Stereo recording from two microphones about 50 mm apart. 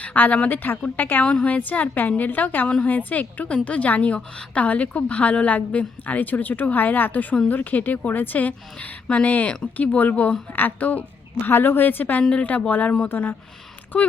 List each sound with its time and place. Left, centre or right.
0.0 s a woman's voice: left
1.2 s a woman's voice: left
11.4 s a woman's voice: left
13.1 s a woman's voice: left
13.9 s a woman's voice: left